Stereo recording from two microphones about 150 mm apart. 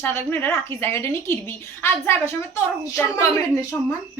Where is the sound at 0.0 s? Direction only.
15° left (ahead or behind).